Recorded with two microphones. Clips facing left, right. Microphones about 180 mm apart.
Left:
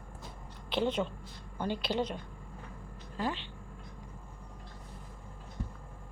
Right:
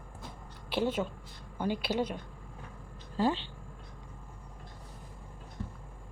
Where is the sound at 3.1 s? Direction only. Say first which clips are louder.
Right 6 dB; 30° right (ahead or behind).